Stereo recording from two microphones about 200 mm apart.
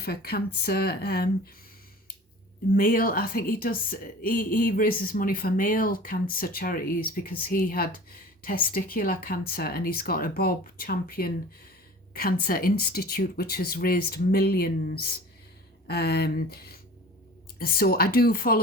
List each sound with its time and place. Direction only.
0.0 s speech: 50° left (ahead or behind)
2.6 s speech: 45° left (ahead or behind)